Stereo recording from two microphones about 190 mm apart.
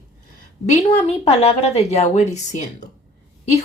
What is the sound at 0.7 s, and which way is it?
A woman's voice, 35° left (ahead or behind).